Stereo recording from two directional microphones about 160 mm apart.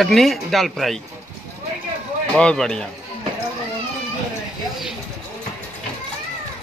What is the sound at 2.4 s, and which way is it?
Speech, 5° left (ahead or behind).